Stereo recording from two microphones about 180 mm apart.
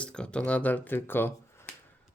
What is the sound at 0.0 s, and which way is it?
Speech, 5° left (ahead or behind).